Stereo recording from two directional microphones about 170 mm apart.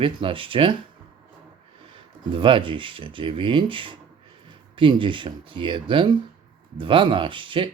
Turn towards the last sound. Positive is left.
turn(degrees=-30)  # may be behind; listen again after turning